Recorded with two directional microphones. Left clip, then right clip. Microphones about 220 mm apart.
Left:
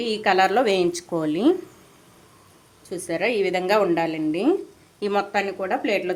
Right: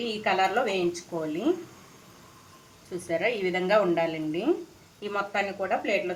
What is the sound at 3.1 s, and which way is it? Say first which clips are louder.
A woman's voice: left 4 dB; 40° left (ahead or behind).